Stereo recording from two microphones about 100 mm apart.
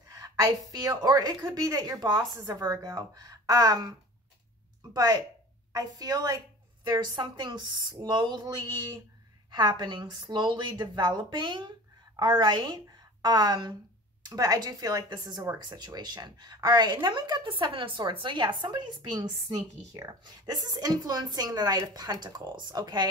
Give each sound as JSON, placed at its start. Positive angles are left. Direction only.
{"t": 0.1, "sound": "a woman's voice", "side_deg": -35}
{"t": 4.9, "sound": "a woman's voice", "side_deg": -35}